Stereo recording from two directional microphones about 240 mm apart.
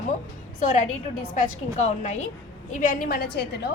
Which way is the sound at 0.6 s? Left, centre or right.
Left.